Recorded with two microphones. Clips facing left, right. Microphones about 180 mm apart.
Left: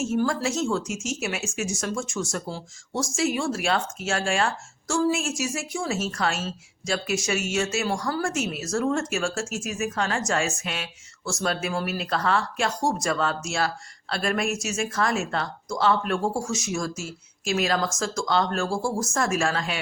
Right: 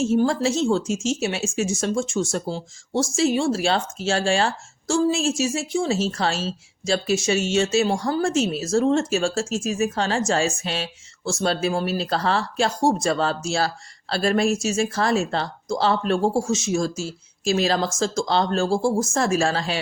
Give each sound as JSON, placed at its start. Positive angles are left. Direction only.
{"t": 0.0, "sound": "speech", "side_deg": -30}